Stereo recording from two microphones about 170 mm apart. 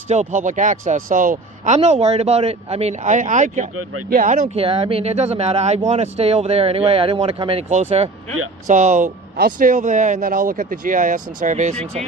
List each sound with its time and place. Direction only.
0.1 s speech: 45° right (ahead or behind)
4.5 s speech: 35° right (ahead or behind)